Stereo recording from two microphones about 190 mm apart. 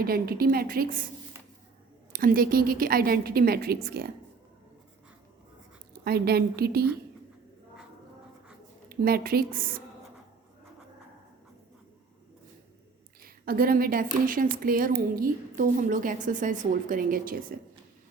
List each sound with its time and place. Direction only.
0.0 s a woman's voice: 55° right (ahead or behind)
2.1 s a woman's voice: 50° right (ahead or behind)
6.1 s a woman's voice: 55° right (ahead or behind)
8.9 s a woman's voice: 50° right (ahead or behind)
13.2 s a woman's voice: 50° right (ahead or behind)